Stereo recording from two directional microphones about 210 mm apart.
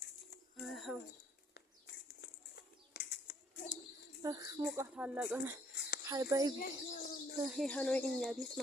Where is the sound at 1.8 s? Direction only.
55° left (ahead or behind).